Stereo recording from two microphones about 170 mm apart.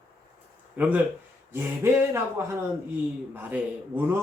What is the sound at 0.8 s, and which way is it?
A man's voice, 10° right (ahead or behind).